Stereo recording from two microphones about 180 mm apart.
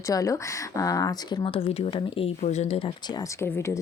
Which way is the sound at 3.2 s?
15° left (ahead or behind).